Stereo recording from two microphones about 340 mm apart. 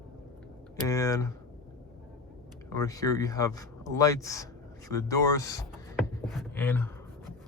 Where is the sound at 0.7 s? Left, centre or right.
Centre.